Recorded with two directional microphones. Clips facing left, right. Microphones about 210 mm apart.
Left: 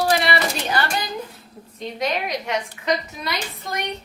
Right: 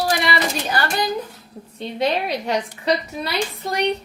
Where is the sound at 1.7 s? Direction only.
30° right (ahead or behind).